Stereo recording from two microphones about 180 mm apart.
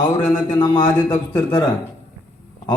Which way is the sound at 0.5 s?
25° left (ahead or behind).